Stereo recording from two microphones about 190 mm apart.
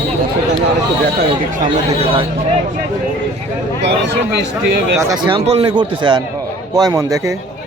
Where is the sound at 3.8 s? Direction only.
65° right (ahead or behind).